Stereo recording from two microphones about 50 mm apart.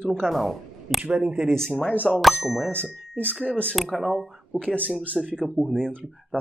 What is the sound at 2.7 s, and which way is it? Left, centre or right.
Speech, left.